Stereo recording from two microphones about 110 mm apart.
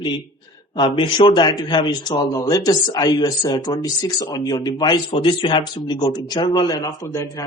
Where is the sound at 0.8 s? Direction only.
50° left (ahead or behind).